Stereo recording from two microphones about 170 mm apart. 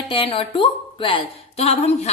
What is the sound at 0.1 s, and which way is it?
Speech, 30° left (ahead or behind).